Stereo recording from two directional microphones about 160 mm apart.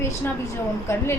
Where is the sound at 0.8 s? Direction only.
15° left (ahead or behind).